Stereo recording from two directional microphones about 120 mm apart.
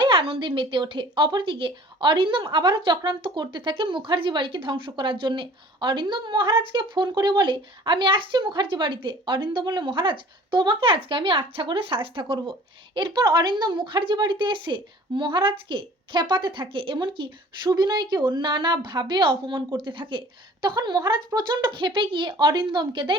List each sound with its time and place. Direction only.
0.0 s a woman's voice: 45° right (ahead or behind)